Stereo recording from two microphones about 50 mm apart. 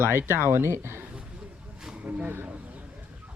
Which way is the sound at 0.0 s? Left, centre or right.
Right.